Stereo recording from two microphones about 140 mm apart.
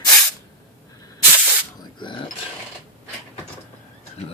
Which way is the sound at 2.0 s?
35° left (ahead or behind).